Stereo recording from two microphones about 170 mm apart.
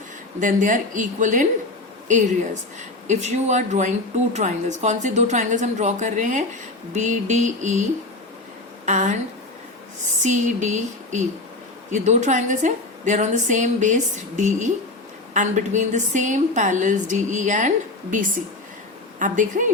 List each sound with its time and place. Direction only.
0.3 s speech: 50° right (ahead or behind)
8.9 s speech: 45° right (ahead or behind)
10.2 s speech: 45° right (ahead or behind)
19.2 s speech: 50° right (ahead or behind)